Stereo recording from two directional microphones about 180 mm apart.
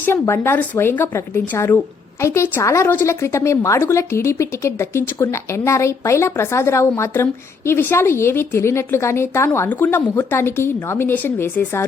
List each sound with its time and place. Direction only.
0.0 s a woman's voice: 15° left (ahead or behind)